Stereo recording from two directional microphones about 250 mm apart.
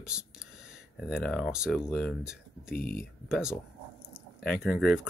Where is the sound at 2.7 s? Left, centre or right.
Left.